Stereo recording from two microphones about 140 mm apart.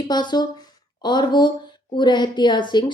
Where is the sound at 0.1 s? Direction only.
30° left (ahead or behind).